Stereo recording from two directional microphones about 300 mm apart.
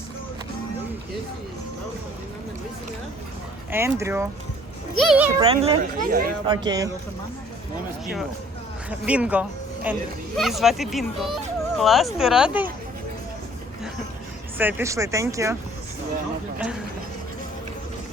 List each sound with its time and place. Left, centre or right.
3.7 s speech: centre
5.4 s speech: centre
6.5 s speech: centre
8.9 s speech: centre
14.6 s speech: centre